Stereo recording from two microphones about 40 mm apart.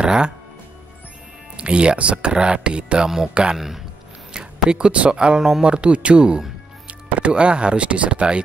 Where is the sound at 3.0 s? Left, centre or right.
Centre.